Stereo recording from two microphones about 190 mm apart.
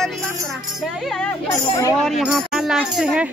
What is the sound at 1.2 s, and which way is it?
Speech, 15° left (ahead or behind).